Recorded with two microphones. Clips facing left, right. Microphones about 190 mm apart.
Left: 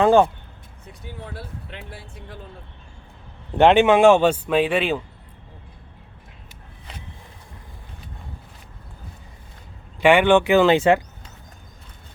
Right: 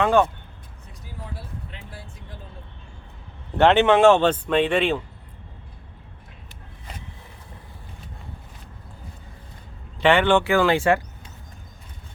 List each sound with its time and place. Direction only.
0.0 s speech: 30° left (ahead or behind)
1.3 s vehicle: 70° left (ahead or behind)
3.6 s speech: 15° left (ahead or behind)
10.0 s speech: 10° left (ahead or behind)